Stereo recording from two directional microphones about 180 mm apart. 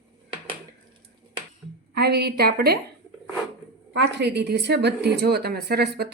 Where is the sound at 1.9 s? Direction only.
65° right (ahead or behind).